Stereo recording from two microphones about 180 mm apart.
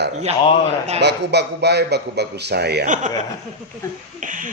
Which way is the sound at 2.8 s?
45° right (ahead or behind).